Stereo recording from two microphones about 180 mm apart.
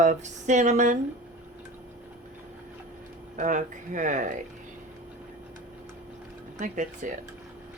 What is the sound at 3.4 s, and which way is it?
Speech, 45° right (ahead or behind).